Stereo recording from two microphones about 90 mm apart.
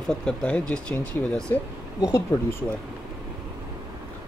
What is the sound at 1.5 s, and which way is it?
Speech, 30° left (ahead or behind).